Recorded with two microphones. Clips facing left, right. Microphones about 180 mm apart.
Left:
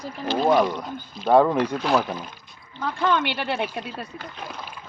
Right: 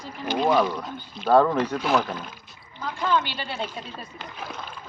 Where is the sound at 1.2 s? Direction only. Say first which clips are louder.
Left 1 dB; 15° left (ahead or behind).